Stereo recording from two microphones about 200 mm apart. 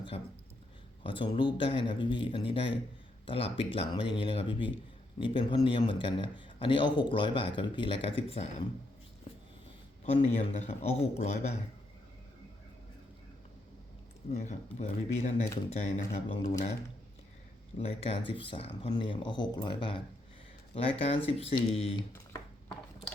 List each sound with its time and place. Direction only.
1.0 s a man's voice: 25° left (ahead or behind)
10.0 s a man's voice: 30° left (ahead or behind)
14.3 s a man's voice: 35° left (ahead or behind)
17.7 s a man's voice: 30° left (ahead or behind)